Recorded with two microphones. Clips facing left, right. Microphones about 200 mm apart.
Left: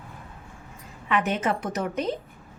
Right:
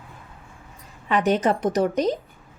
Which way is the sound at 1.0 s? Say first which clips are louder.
Right 5 dB; 35° right (ahead or behind).